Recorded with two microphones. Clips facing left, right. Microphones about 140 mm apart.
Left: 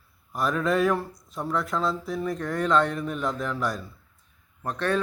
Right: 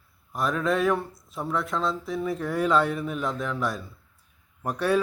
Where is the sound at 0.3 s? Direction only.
Centre (ahead or behind).